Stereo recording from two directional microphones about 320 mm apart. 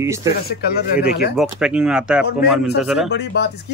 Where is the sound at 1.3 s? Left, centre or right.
Centre.